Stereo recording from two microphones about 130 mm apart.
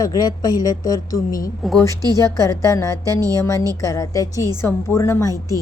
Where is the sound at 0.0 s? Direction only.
30° left (ahead or behind).